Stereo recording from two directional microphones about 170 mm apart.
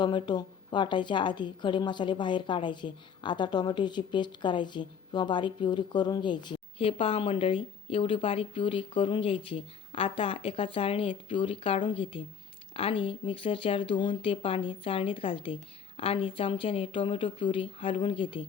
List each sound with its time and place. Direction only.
0.0 s a woman's voice: 25° left (ahead or behind)